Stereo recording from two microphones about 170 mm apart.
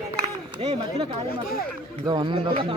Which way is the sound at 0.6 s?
35° right (ahead or behind).